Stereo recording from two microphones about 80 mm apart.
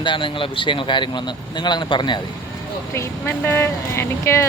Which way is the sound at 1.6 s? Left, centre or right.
Left.